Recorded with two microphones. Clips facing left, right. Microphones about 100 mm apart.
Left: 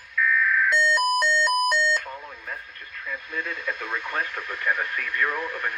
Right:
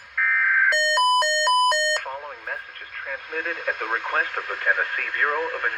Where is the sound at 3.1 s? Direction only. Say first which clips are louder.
Right 2 dB; 90° right; by 4.4 s 70° right (ahead or behind).